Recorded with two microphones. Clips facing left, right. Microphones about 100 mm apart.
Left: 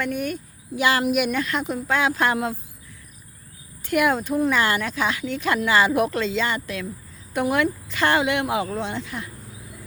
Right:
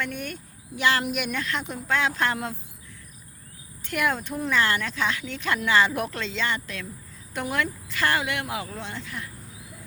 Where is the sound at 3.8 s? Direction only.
10° left (ahead or behind).